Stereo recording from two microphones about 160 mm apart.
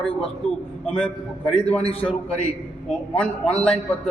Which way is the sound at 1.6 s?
10° left (ahead or behind).